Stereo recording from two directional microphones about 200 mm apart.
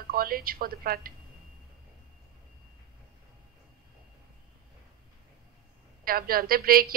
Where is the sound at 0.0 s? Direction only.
45° right (ahead or behind).